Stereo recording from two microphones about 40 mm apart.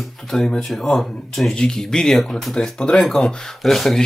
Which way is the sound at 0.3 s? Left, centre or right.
Centre.